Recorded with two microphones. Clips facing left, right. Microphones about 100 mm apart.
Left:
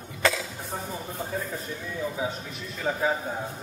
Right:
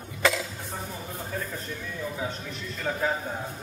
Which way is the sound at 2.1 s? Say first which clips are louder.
Left 2 dB; 5° left (ahead or behind).